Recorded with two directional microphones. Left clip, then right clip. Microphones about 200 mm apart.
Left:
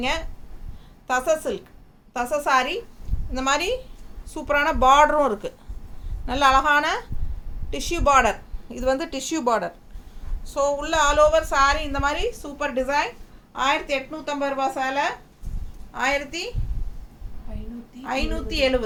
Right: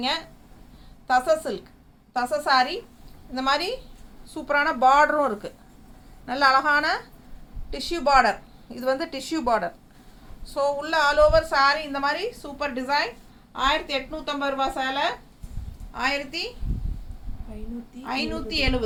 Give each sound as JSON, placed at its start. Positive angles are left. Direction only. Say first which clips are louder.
{"t": 1.0, "sound": "a woman's voice", "louder": "right 1 dB", "side_deg": 15}
{"t": 8.0, "sound": "a woman's voice", "louder": "left 1 dB", "side_deg": 25}
{"t": 17.5, "sound": "a woman's voice", "louder": "right 1 dB", "side_deg": 10}